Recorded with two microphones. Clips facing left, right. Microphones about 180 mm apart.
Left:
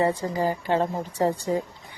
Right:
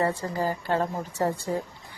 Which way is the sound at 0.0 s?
15° left (ahead or behind).